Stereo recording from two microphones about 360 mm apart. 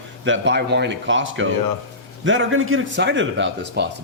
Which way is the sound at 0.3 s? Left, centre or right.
Right.